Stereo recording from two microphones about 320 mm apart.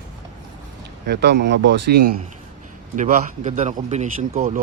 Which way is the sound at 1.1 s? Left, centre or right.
Right.